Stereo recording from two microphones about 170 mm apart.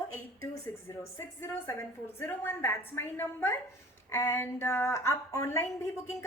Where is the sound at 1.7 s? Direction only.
15° left (ahead or behind).